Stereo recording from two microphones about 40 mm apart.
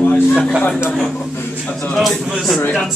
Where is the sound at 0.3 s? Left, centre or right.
Right.